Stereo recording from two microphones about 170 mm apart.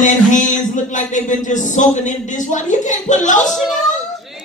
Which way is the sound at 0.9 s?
45° left (ahead or behind).